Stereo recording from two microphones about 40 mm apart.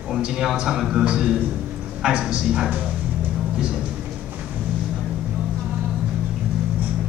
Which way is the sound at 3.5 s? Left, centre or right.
Centre.